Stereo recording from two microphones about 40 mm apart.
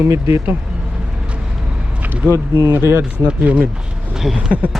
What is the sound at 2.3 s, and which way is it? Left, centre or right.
Speech, right.